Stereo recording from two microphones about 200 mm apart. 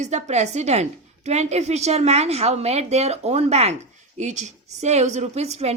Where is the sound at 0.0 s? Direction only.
35° right (ahead or behind).